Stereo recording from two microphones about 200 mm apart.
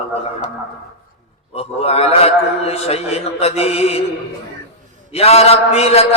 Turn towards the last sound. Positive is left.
turn(degrees=30)  # may be behind; listen again after turning